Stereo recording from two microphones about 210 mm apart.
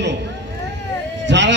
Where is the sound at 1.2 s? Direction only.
60° right (ahead or behind).